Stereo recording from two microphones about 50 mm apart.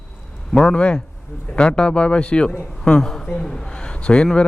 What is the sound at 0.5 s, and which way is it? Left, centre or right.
A woman's voice, centre.